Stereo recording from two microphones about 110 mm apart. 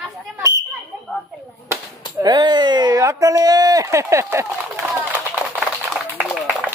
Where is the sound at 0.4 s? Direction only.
25° right (ahead or behind).